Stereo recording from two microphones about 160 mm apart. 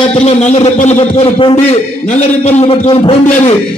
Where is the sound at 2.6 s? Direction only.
35° left (ahead or behind).